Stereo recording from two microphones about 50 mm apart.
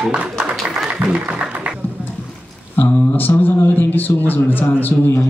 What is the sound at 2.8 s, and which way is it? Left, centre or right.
Speech, left.